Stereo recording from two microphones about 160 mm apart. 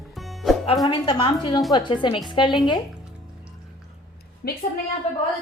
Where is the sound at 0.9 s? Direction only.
30° left (ahead or behind).